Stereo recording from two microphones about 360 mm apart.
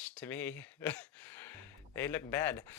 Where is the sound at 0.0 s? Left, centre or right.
Centre.